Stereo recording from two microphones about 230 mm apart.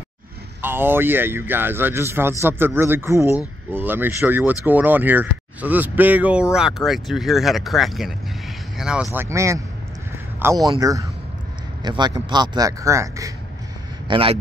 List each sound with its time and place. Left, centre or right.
0.6 s speech: centre